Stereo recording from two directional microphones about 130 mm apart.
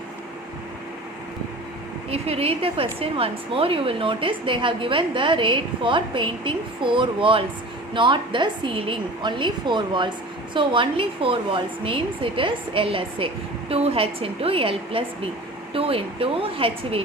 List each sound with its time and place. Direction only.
2.0 s a woman's voice: 50° right (ahead or behind)